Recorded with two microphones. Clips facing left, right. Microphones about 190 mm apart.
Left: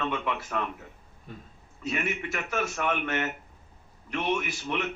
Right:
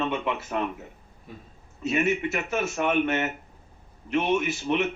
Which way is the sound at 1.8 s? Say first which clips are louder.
Right 7 dB; 25° right (ahead or behind).